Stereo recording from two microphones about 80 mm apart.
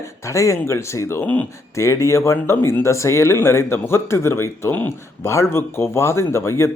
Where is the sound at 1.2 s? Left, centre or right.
Centre.